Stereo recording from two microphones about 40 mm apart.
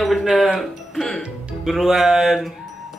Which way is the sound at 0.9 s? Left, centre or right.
Centre.